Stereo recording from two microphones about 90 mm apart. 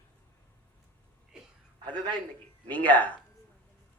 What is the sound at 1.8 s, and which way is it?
Speech, 60° right (ahead or behind).